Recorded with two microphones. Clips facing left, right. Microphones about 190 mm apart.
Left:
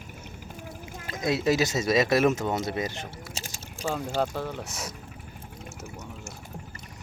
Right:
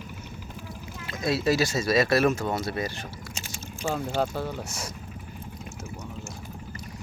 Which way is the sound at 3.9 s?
Centre (ahead or behind).